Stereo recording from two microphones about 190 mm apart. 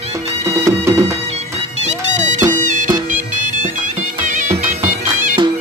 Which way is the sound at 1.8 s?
40° right (ahead or behind).